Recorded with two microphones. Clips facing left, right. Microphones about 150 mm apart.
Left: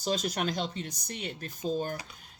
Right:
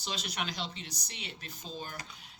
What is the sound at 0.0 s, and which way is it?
Speech, 45° left (ahead or behind).